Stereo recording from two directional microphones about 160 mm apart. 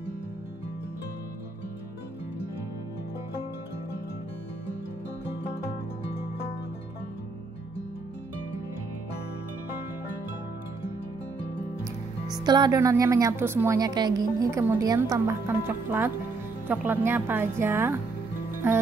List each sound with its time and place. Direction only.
11.8 s speech: 25° right (ahead or behind)